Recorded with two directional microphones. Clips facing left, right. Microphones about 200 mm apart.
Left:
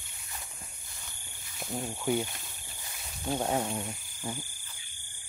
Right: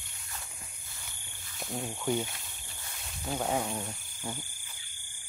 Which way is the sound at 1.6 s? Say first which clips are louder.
Left 1 dB; centre (ahead or behind).